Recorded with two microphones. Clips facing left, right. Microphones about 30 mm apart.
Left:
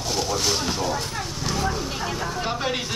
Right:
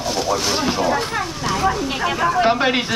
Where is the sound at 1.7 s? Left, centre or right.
Right.